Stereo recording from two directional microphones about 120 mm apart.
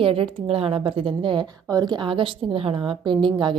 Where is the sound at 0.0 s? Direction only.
50° right (ahead or behind).